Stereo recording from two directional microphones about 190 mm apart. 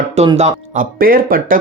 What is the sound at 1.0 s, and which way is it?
Speech, 50° right (ahead or behind).